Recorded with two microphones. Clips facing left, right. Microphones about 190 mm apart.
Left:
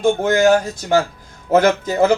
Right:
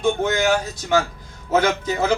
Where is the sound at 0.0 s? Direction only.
45° left (ahead or behind).